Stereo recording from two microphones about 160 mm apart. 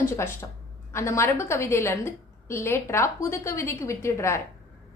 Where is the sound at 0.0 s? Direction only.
15° left (ahead or behind).